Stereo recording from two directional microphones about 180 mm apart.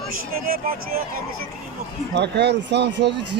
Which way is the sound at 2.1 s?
70° right (ahead or behind).